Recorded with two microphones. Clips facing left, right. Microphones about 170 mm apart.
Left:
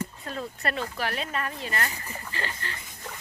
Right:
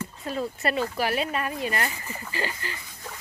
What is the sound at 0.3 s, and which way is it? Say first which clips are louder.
Speech: right 7 dB; 5° right (ahead or behind).